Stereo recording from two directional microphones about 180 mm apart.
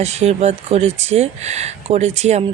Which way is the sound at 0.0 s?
40° right (ahead or behind).